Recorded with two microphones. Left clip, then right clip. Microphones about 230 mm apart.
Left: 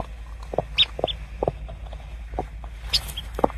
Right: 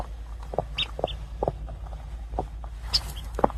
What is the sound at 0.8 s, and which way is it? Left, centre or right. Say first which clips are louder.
Chicken: left 7 dB; centre.